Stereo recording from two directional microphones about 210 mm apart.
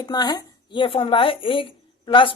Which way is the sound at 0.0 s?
20° left (ahead or behind).